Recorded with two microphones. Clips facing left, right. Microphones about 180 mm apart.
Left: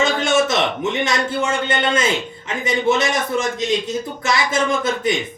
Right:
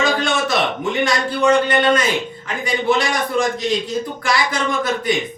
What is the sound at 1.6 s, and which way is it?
A man's voice, 25° left (ahead or behind).